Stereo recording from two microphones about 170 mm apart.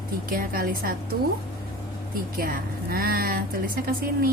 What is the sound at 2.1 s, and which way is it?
A woman's voice, 55° right (ahead or behind).